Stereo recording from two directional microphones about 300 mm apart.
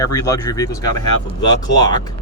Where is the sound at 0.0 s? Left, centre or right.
Centre.